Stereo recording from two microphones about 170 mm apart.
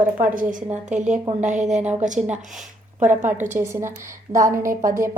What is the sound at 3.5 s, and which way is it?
A woman's voice, 15° right (ahead or behind).